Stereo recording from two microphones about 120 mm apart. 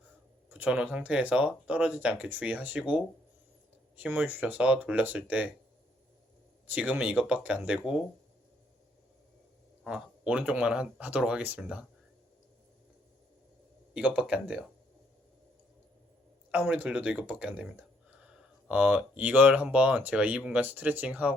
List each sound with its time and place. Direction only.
0.5 s speech: 10° right (ahead or behind)
6.7 s speech: 15° right (ahead or behind)
9.8 s speech: 5° right (ahead or behind)
13.9 s speech: 10° right (ahead or behind)
16.5 s speech: 10° right (ahead or behind)